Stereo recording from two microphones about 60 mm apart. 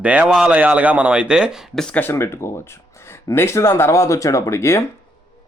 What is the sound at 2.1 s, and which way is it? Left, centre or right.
Speech, left.